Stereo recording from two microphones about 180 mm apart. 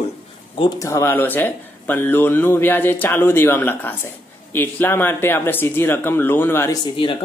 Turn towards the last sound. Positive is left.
turn(degrees=25)  # may be behind; listen again after turning